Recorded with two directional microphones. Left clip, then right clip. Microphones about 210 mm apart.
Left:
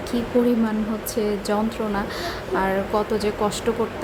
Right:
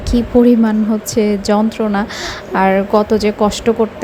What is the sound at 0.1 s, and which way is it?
A woman's voice, 30° right (ahead or behind).